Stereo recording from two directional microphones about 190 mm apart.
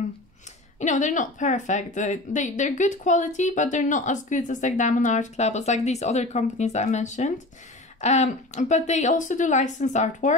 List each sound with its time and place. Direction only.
0.7 s speech: 40° left (ahead or behind)